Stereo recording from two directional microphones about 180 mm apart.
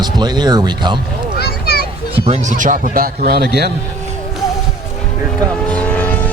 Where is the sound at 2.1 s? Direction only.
35° right (ahead or behind); by 3.7 s 65° right (ahead or behind).